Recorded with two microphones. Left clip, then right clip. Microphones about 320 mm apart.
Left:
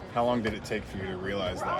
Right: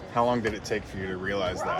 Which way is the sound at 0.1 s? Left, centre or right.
Right.